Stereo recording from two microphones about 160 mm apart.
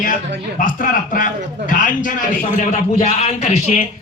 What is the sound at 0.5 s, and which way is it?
A man's voice, 55° left (ahead or behind).